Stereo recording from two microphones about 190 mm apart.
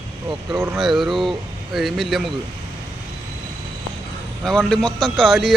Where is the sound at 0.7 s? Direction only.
Centre (ahead or behind).